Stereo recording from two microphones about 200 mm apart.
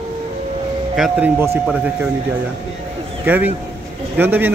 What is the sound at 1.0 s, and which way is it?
Speech, 5° right (ahead or behind).